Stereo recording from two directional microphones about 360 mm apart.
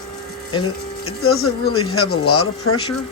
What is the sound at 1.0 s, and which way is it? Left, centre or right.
Speech, left.